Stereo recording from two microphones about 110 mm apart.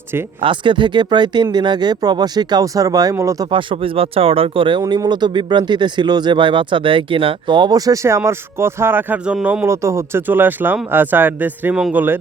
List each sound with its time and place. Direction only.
0.4 s speech: 45° right (ahead or behind); by 3.3 s 30° right (ahead or behind)
3.5 s speech: 60° right (ahead or behind); by 9.6 s 10° right (ahead or behind)
9.6 s speech: 25° right (ahead or behind)